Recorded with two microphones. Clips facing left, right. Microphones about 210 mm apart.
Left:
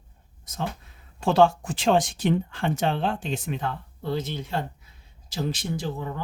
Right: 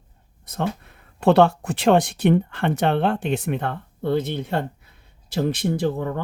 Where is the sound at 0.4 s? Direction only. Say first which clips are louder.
Right 6 dB; 60° right (ahead or behind).